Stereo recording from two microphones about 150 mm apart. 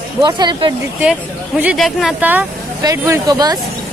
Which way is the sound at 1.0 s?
10° right (ahead or behind).